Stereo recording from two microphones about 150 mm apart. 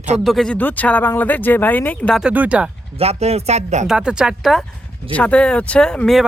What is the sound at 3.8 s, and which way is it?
Speech, 5° right (ahead or behind).